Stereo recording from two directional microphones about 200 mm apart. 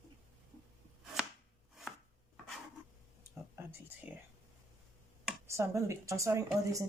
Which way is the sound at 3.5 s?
10° right (ahead or behind).